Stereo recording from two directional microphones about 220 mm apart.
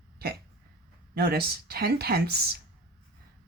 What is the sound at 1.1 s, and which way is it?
Speech, 45° right (ahead or behind).